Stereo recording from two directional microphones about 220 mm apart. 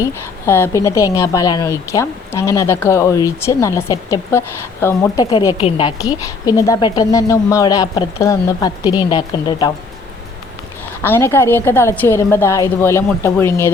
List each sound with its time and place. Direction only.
0.0 s a woman's voice: 10° left (ahead or behind)
11.0 s a woman's voice: 10° left (ahead or behind)